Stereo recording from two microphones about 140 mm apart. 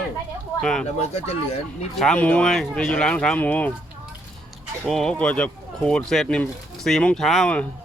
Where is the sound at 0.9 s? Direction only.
50° left (ahead or behind).